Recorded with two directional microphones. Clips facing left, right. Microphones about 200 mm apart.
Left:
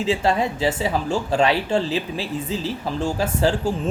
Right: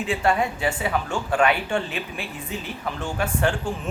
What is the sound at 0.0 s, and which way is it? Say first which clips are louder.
Speech: left 2 dB; 25° left (ahead or behind).